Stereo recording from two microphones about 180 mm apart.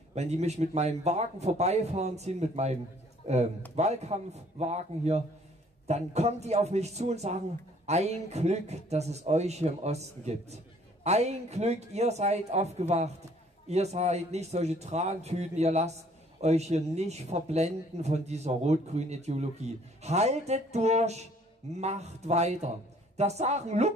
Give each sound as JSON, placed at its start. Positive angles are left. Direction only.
{"t": 0.1, "sound": "speech", "side_deg": -35}